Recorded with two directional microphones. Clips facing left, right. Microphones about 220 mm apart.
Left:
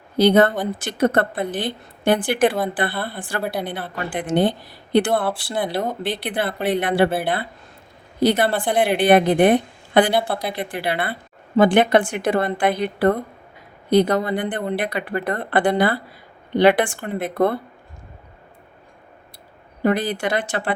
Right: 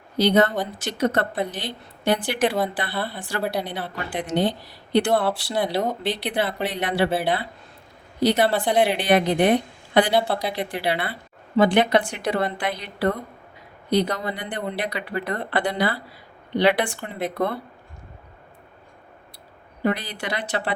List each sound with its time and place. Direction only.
0.2 s a woman's voice: 50° left (ahead or behind)
5.1 s a woman's voice: 5° left (ahead or behind)
6.0 s a woman's voice: 50° left (ahead or behind)
10.2 s a woman's voice: 5° left (ahead or behind)
10.5 s a woman's voice: 50° left (ahead or behind)
19.8 s a woman's voice: 50° left (ahead or behind)